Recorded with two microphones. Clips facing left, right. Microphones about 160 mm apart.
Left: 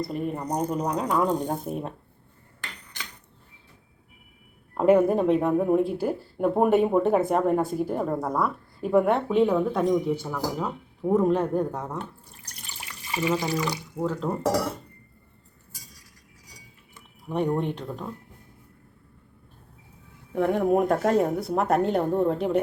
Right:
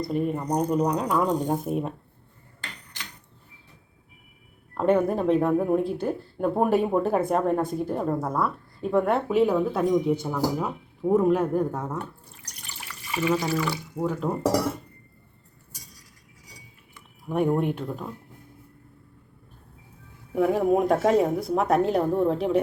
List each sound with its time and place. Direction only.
0.0 s speech: centre (ahead or behind)
4.7 s speech: 5° left (ahead or behind)
13.1 s water: 25° left (ahead or behind)
13.3 s speech: 15° left (ahead or behind)
14.0 s speech: 15° right (ahead or behind)
17.2 s speech: 5° right (ahead or behind)
20.3 s speech: 5° right (ahead or behind)